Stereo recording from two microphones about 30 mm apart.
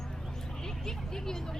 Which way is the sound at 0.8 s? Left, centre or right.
Centre.